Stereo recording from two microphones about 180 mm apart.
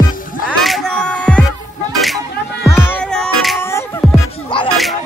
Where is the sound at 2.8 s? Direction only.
5° left (ahead or behind).